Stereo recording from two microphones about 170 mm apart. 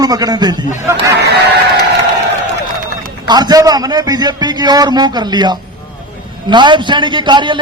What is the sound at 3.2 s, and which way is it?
A man's voice, 25° right (ahead or behind).